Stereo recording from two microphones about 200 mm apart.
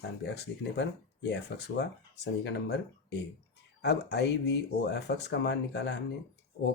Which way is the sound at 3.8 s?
60° left (ahead or behind).